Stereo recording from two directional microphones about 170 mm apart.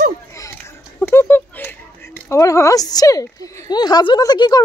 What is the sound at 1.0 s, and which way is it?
A woman's voice, 15° left (ahead or behind).